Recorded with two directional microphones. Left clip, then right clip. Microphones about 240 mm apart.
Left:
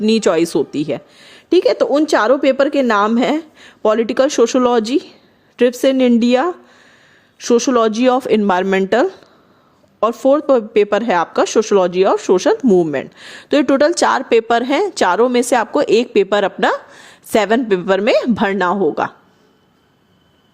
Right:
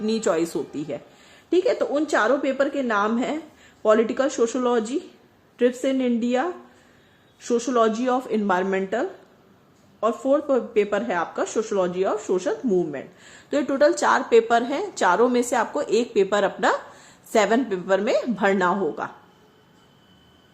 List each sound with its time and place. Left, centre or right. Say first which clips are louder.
0.0 s a woman's voice: left 9 dB; left